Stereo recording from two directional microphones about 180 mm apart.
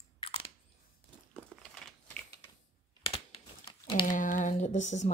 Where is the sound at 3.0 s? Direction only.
30° left (ahead or behind).